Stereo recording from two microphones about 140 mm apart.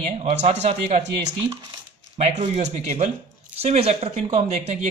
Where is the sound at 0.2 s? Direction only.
50° right (ahead or behind).